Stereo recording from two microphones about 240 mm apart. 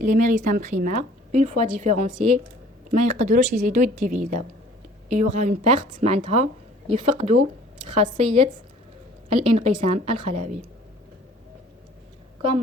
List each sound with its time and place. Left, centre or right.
0.0 s a woman's voice: right